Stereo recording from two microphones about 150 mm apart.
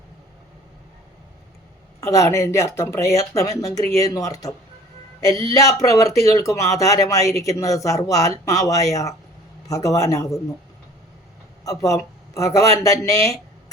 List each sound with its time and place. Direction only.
2.0 s speech: 20° left (ahead or behind)
11.6 s speech: 25° left (ahead or behind)